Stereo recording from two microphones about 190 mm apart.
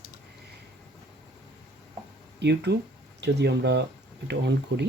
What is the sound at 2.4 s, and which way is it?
Speech, 60° right (ahead or behind).